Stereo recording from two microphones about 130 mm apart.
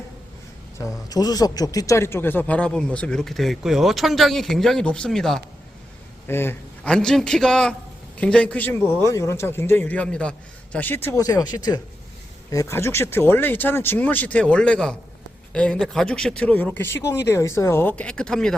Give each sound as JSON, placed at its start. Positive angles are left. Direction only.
{"t": 0.8, "sound": "speech", "side_deg": 30}
{"t": 6.2, "sound": "speech", "side_deg": 15}
{"t": 6.8, "sound": "a man's voice", "side_deg": 5}